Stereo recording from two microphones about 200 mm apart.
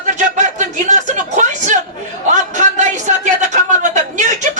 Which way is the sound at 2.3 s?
35° right (ahead or behind).